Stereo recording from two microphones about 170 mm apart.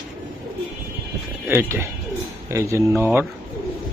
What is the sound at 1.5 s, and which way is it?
Speech, 15° right (ahead or behind).